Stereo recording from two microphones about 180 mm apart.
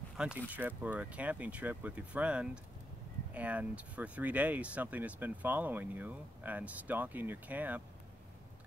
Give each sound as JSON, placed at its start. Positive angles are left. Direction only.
{"t": 0.5, "sound": "speech", "side_deg": -10}